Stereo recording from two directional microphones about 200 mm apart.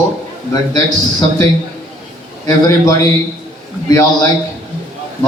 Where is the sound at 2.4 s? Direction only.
15° left (ahead or behind).